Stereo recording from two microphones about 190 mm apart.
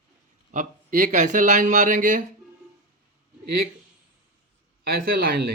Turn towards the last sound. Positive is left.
turn(degrees=-55)  # may be behind; listen again after turning